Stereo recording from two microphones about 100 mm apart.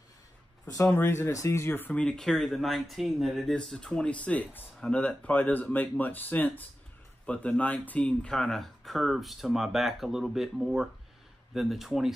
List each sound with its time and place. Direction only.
0.8 s speech: 25° left (ahead or behind); by 12.1 s 5° right (ahead or behind)